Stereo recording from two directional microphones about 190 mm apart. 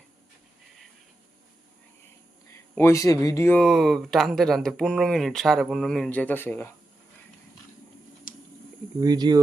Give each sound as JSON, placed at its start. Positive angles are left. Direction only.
{"t": 2.5, "sound": "speech", "side_deg": 15}
{"t": 8.3, "sound": "a sound", "side_deg": 45}
{"t": 9.0, "sound": "speech", "side_deg": -20}